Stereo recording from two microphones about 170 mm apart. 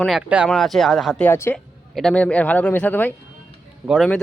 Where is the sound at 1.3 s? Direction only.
15° left (ahead or behind).